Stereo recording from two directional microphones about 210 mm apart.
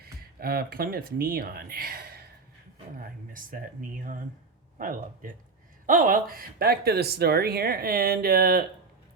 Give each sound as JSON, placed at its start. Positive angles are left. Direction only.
{"t": 0.0, "sound": "speech", "side_deg": -45}
{"t": 3.3, "sound": "speech", "side_deg": -40}